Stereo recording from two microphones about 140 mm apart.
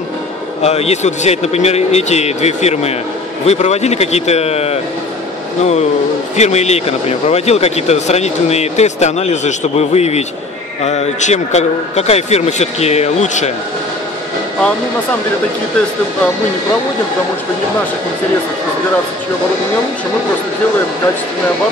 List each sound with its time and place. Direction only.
0.6 s speech: 50° left (ahead or behind)
6.3 s speech: 55° left (ahead or behind)